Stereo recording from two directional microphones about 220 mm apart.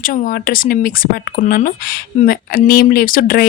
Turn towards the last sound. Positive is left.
turn(degrees=40)  # may be behind; listen again after turning